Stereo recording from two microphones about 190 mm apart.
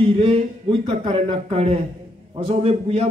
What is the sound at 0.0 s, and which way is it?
A man's voice, 30° right (ahead or behind).